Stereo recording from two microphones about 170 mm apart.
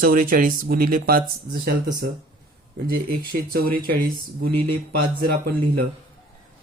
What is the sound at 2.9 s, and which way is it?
Speech, 60° right (ahead or behind).